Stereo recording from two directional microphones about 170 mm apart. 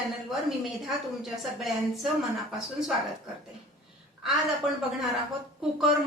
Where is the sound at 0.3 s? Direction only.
Centre (ahead or behind).